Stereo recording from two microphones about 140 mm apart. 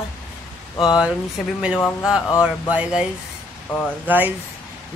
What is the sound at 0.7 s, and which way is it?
Speech, 5° right (ahead or behind).